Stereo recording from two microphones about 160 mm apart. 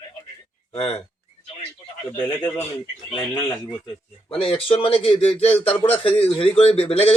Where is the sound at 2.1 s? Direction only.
10° left (ahead or behind).